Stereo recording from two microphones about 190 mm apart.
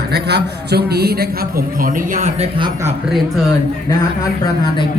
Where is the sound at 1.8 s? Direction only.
40° right (ahead or behind).